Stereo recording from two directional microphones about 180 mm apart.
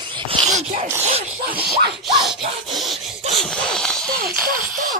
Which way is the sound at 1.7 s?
65° right (ahead or behind).